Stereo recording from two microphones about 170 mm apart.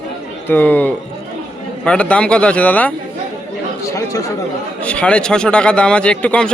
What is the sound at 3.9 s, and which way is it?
Speech, 20° left (ahead or behind).